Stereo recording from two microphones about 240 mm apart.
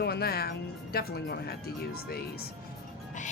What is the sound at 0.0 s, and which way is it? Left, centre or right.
Speech, left.